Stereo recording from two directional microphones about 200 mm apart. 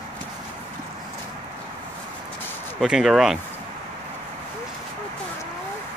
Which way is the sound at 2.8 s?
Centre (ahead or behind).